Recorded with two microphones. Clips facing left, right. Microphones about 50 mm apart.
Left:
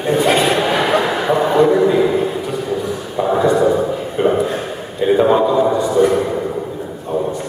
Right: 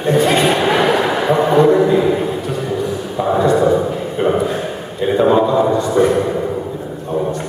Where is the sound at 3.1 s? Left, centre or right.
Centre.